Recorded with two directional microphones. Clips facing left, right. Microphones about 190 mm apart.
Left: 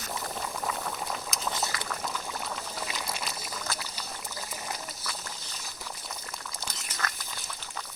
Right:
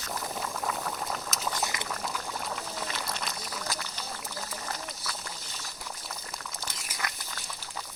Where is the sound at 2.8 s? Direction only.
10° left (ahead or behind).